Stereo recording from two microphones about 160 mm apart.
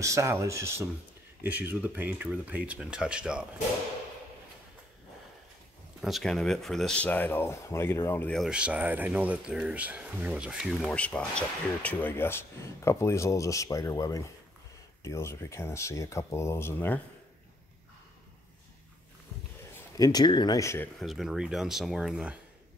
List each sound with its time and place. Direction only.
0.0 s speech: 20° right (ahead or behind)
5.9 s speech: centre (ahead or behind); by 8.3 s 15° left (ahead or behind)
8.3 s speech: centre (ahead or behind)
20.0 s speech: 25° left (ahead or behind)
21.0 s speech: centre (ahead or behind)